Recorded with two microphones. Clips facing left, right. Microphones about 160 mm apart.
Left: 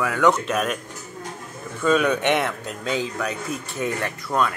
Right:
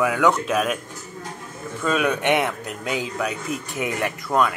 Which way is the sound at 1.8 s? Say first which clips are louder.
Left 2 dB; 5° right (ahead or behind).